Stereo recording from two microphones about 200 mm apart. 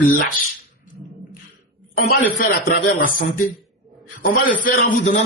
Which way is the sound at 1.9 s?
45° left (ahead or behind).